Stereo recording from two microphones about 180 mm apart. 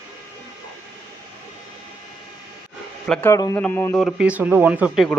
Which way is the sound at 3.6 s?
10° left (ahead or behind).